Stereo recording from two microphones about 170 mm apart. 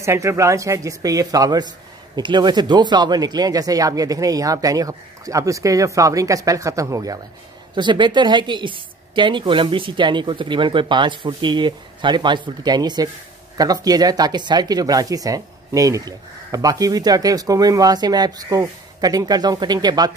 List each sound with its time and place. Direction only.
0.0 s speech: 15° right (ahead or behind)